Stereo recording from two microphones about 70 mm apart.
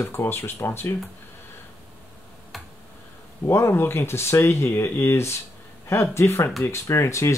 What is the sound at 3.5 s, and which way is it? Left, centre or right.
Speech, left.